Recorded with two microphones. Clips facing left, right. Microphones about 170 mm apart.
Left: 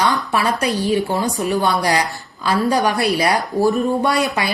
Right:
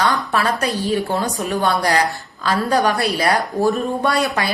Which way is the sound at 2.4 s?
20° left (ahead or behind).